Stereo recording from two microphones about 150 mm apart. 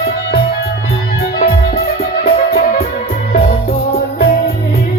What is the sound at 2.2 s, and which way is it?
Music, 90° left.